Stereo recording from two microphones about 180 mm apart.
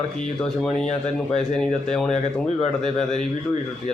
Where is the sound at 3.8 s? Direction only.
35° left (ahead or behind).